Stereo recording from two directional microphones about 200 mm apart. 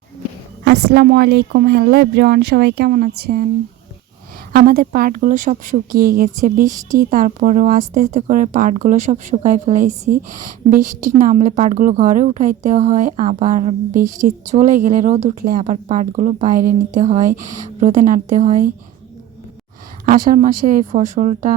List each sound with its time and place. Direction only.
0.6 s a woman's voice: 55° right (ahead or behind)
4.5 s a woman's voice: 50° right (ahead or behind)
20.1 s a woman's voice: 40° right (ahead or behind)